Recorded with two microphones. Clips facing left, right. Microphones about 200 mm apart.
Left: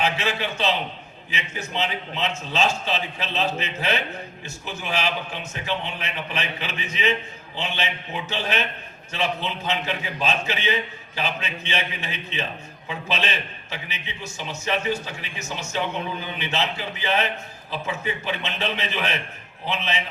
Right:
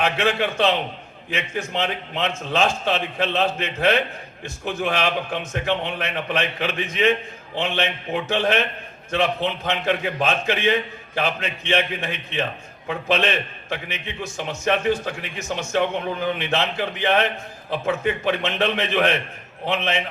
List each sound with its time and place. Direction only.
0.0 s a man's voice: 55° right (ahead or behind)